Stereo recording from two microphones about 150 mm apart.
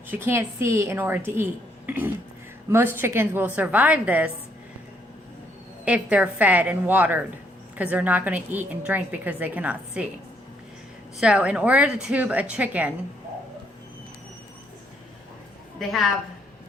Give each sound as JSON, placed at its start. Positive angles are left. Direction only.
{"t": 0.1, "sound": "a woman's voice", "side_deg": -15}
{"t": 2.6, "sound": "a woman's voice", "side_deg": -15}
{"t": 5.8, "sound": "a woman's voice", "side_deg": -10}
{"t": 11.2, "sound": "a woman's voice", "side_deg": -5}
{"t": 15.8, "sound": "a woman's voice", "side_deg": 0}